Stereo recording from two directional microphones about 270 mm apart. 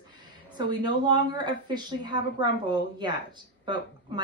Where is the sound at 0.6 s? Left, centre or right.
Centre.